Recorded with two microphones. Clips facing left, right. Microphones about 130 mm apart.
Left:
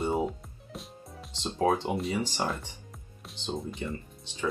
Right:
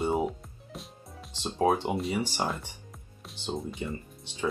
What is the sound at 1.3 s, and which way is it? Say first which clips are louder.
Speech: right 1 dB; 15° right (ahead or behind).